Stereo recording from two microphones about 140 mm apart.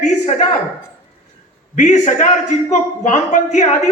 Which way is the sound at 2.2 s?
55° left (ahead or behind).